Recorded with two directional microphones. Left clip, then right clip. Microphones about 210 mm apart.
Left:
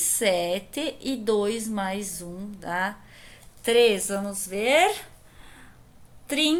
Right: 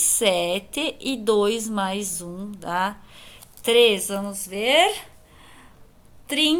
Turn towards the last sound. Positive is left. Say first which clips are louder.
# right 3 dB
turn(degrees=-5)  # may be behind; listen again after turning